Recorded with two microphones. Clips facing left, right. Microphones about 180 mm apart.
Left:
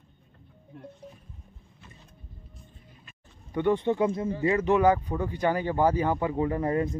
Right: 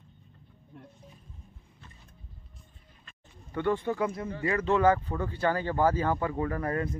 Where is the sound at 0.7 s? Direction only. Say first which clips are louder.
Left 5 dB; centre (ahead or behind).